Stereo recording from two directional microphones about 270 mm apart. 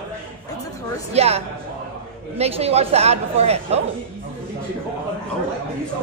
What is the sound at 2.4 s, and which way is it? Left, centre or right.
A woman's voice, right.